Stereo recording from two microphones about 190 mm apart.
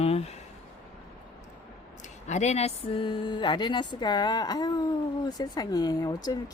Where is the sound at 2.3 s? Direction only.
35° left (ahead or behind).